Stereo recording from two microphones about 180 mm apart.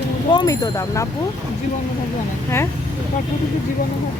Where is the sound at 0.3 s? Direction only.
25° left (ahead or behind).